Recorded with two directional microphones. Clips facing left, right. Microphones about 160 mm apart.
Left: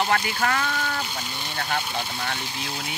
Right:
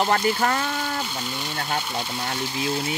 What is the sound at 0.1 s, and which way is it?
Speech, 30° right (ahead or behind).